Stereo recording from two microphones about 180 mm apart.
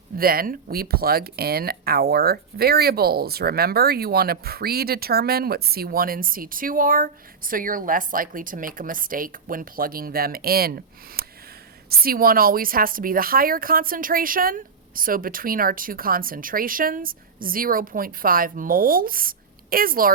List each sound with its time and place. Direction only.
0.2 s speech: 55° right (ahead or behind)
11.2 s a sound: 55° right (ahead or behind)
11.9 s speech: 55° right (ahead or behind)